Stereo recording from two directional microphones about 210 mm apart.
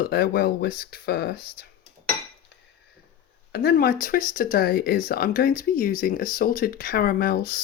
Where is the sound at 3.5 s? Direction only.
50° left (ahead or behind).